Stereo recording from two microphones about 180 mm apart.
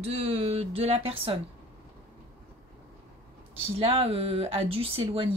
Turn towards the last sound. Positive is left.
turn(degrees=-30)  # may be behind; listen again after turning